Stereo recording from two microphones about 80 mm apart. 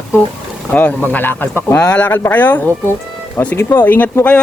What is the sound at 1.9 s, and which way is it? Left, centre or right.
Speech, centre.